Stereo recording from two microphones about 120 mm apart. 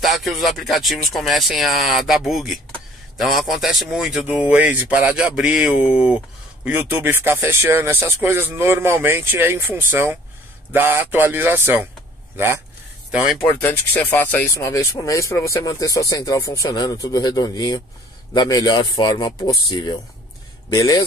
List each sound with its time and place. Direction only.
0.0 s a man's voice: centre (ahead or behind); by 11.9 s 15° right (ahead or behind)
13.1 s speech: centre (ahead or behind)
13.5 s speech: 15° left (ahead or behind)
14.5 s speech: 25° left (ahead or behind)